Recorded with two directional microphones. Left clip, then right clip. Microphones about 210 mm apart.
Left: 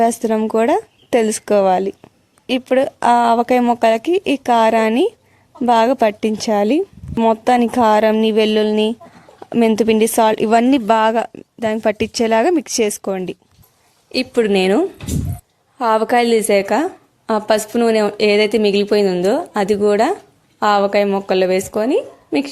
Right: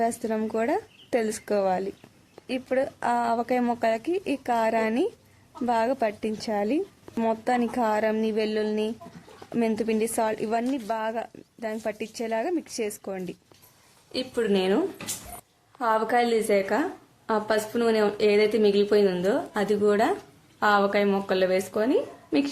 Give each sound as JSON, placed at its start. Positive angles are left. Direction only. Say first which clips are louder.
{"t": 0.0, "sound": "a woman's voice", "louder": "left 11 dB", "side_deg": 40}